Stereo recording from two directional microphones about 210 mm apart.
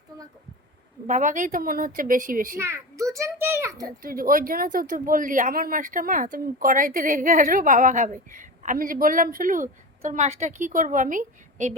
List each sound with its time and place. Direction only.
1.0 s speech: 35° right (ahead or behind)
2.6 s a child's voice: 15° right (ahead or behind)
3.8 s speech: 40° right (ahead or behind)